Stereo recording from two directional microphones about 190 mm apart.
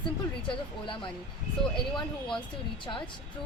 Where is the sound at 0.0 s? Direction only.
25° left (ahead or behind).